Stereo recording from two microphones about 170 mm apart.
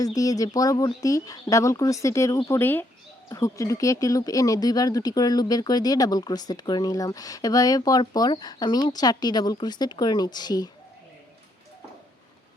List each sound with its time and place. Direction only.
0.0 s speech: 20° left (ahead or behind)